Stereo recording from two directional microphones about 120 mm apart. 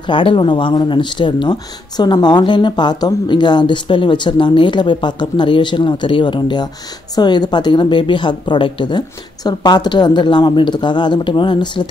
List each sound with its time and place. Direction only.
0.0 s speech: 45° left (ahead or behind)